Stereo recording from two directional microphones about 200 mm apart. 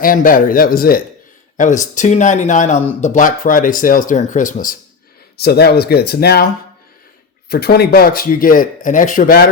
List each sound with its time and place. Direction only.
0.0 s speech: 45° left (ahead or behind)
5.4 s speech: 55° left (ahead or behind)
7.5 s speech: 50° left (ahead or behind)